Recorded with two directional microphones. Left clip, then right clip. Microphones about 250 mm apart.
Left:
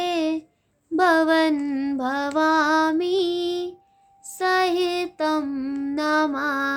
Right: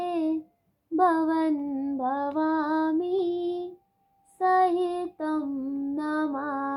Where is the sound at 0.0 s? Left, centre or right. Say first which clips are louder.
Left 4 dB; left.